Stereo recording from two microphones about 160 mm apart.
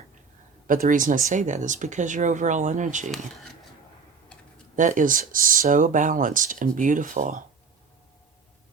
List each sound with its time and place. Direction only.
0.7 s speech: 55° right (ahead or behind)
4.8 s speech: 55° right (ahead or behind)